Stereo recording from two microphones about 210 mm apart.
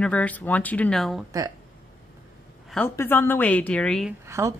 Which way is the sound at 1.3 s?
15° right (ahead or behind).